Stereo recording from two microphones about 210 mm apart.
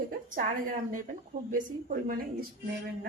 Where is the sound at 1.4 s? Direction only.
40° right (ahead or behind).